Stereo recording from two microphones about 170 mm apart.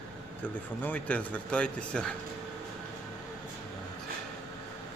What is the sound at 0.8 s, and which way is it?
Speech, 10° left (ahead or behind).